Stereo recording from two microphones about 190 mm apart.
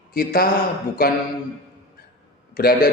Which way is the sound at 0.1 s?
50° left (ahead or behind).